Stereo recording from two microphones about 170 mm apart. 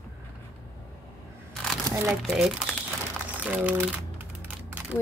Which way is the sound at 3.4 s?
10° right (ahead or behind).